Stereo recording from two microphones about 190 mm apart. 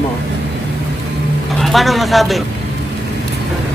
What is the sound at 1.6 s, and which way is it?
Speech, centre (ahead or behind).